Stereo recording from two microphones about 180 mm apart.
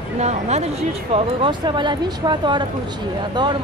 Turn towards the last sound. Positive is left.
turn(degrees=-25)  # may be behind; listen again after turning